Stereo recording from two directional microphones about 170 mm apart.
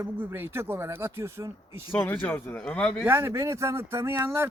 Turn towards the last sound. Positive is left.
turn(degrees=-15)  # may be behind; listen again after turning